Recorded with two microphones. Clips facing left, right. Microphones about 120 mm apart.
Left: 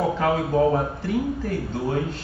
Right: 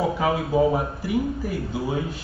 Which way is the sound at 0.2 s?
5° right (ahead or behind).